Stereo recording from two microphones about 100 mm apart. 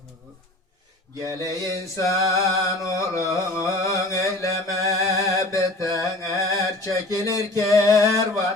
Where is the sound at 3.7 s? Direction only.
30° left (ahead or behind).